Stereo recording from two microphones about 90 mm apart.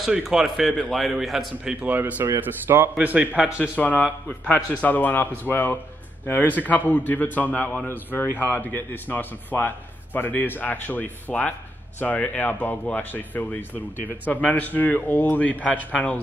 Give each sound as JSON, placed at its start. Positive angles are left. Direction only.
{"t": 0.0, "sound": "a man's voice", "side_deg": -5}
{"t": 3.7, "sound": "a man's voice", "side_deg": 15}